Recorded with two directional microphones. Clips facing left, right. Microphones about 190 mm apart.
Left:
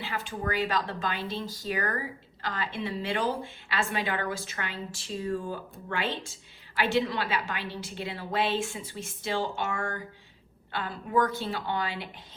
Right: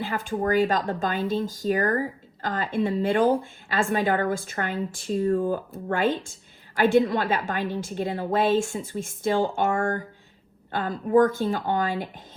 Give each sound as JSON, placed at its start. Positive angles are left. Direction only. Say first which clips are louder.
{"t": 0.0, "sound": "speech", "louder": "right 7 dB", "side_deg": -50}